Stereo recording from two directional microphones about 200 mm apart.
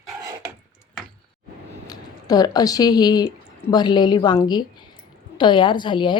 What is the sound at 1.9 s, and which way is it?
A woman's voice, 20° left (ahead or behind).